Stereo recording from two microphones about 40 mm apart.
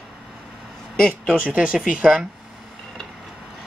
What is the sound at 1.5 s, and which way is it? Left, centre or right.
Speech, right.